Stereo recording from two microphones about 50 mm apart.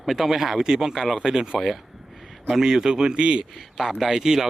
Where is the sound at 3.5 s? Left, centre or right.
Centre.